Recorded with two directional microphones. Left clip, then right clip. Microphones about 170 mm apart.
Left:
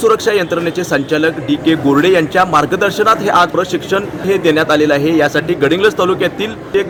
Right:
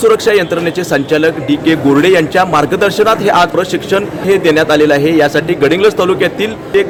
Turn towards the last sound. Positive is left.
turn(degrees=-5)  # may be behind; listen again after turning